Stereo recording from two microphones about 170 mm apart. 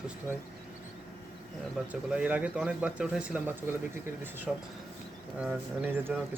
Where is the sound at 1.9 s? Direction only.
5° right (ahead or behind).